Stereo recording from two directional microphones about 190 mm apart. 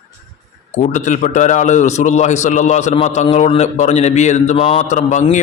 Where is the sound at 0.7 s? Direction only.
40° left (ahead or behind).